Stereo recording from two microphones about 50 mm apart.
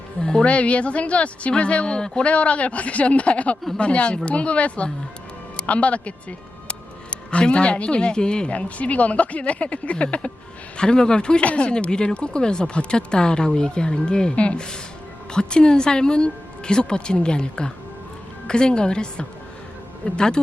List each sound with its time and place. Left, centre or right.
0.4 s speech: left